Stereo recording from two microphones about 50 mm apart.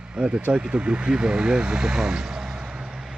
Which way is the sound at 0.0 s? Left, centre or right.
Centre.